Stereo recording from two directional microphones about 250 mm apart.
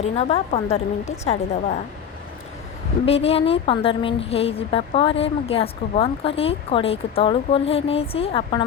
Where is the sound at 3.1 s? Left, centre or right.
Left.